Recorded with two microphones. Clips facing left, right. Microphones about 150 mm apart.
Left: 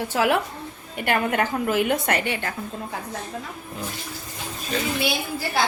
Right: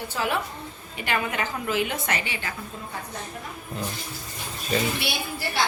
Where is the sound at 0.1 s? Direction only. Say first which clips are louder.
Left 6 dB; 85° left.